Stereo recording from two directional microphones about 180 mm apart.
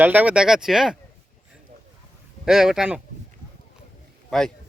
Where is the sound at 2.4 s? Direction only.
5° right (ahead or behind).